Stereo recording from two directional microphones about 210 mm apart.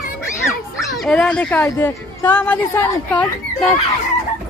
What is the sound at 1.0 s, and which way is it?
A woman's voice, 5° left (ahead or behind).